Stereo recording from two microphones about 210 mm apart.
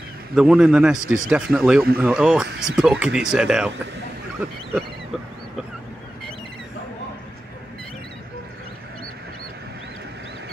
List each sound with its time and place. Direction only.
0.3 s speech: 5° right (ahead or behind)